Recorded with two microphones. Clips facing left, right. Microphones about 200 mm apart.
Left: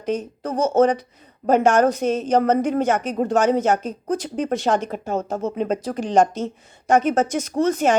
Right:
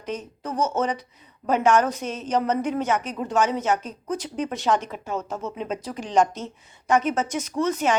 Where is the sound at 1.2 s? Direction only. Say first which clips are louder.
Left 5 dB; 50° left (ahead or behind).